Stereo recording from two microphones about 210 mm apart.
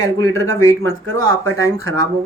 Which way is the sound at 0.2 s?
15° left (ahead or behind).